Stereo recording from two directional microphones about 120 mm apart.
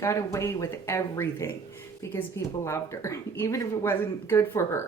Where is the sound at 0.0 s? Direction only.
25° left (ahead or behind).